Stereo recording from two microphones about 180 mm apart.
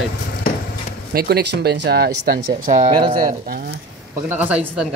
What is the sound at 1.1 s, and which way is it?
Speech, 60° right (ahead or behind).